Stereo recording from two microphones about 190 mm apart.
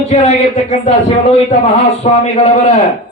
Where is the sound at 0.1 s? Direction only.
35° left (ahead or behind).